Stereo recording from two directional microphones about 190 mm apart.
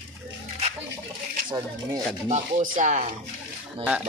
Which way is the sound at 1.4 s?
20° right (ahead or behind).